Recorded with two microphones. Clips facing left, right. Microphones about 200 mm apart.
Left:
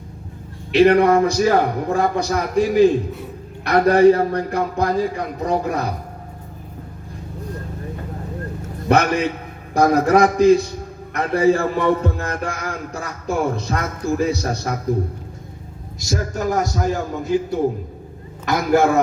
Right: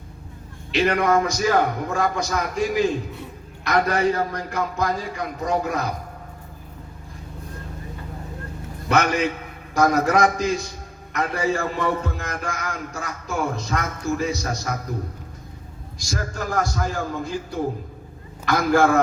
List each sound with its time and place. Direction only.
0.7 s speech: 35° left (ahead or behind)
8.9 s speech: 35° left (ahead or behind)
16.0 s a man's voice: 20° left (ahead or behind)